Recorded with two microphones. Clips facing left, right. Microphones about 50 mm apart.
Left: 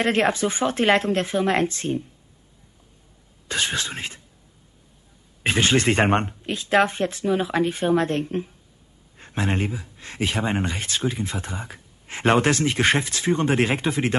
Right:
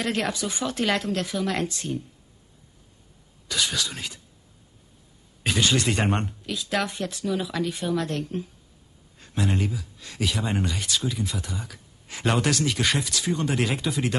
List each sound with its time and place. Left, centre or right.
0.0 s speech: left
3.4 s speech: left
5.4 s speech: left